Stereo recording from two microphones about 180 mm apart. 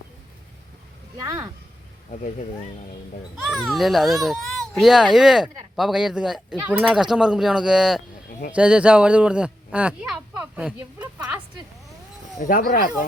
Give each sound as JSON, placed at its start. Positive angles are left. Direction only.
{"t": 1.2, "sound": "speech", "side_deg": -20}
{"t": 3.4, "sound": "a child's voice", "side_deg": 0}
{"t": 12.4, "sound": "speech", "side_deg": 50}